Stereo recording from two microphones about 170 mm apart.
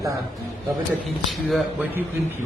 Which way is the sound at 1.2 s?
Centre (ahead or behind).